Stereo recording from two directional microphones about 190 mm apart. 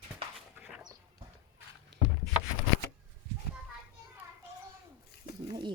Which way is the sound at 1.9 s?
60° right (ahead or behind).